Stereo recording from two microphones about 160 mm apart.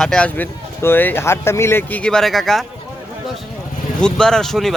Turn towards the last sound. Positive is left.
turn(degrees=0)  # may be behind; listen again after turning